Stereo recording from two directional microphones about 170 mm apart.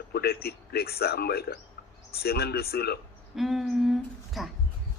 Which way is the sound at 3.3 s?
Centre (ahead or behind).